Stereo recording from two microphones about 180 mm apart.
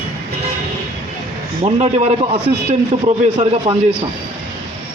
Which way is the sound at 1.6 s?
35° right (ahead or behind).